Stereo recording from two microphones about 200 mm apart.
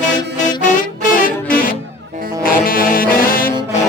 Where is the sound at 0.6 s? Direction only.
40° left (ahead or behind).